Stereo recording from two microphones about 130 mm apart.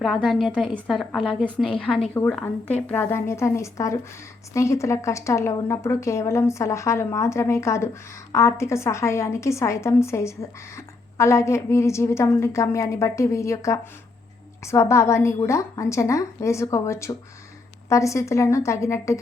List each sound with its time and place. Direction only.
0.0 s a woman's voice: centre (ahead or behind)
2.8 s a woman's voice: 15° left (ahead or behind)